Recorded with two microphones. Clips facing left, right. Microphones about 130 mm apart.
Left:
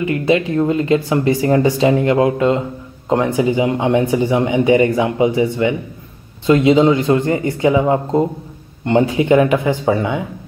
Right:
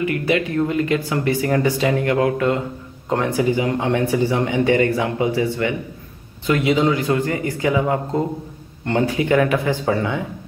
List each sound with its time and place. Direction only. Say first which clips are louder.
0.0 s speech: left 4 dB; 25° left (ahead or behind)